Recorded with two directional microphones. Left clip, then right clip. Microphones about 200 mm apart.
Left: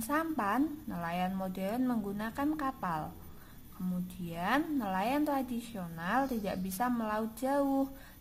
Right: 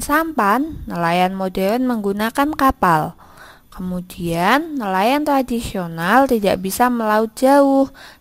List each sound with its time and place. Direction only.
0.1 s a woman's voice: 45° right (ahead or behind)
4.3 s a woman's voice: 45° right (ahead or behind)